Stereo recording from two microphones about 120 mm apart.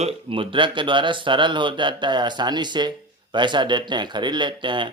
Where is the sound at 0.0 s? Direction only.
50° right (ahead or behind).